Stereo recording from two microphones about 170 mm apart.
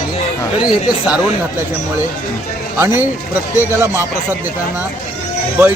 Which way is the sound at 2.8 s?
15° right (ahead or behind).